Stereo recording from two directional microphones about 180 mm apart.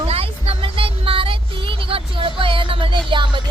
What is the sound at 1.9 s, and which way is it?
Music, 30° right (ahead or behind).